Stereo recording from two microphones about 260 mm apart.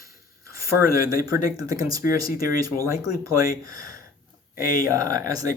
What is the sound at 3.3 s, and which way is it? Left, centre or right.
Speech, centre.